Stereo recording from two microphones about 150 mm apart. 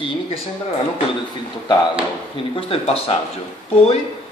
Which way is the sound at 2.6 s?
40° left (ahead or behind).